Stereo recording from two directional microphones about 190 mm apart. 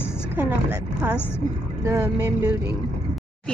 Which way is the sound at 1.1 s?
10° left (ahead or behind).